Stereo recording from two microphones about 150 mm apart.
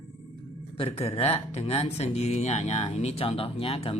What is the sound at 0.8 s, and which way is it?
Speech, 40° left (ahead or behind).